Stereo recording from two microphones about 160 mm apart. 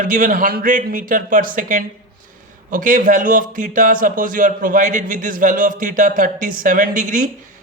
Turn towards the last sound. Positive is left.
turn(degrees=-50)  # may be behind; listen again after turning